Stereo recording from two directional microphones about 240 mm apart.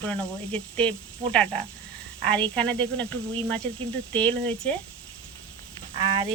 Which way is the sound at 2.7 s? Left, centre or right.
Centre.